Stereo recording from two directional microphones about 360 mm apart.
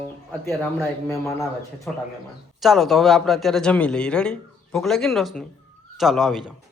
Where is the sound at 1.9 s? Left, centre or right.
Centre.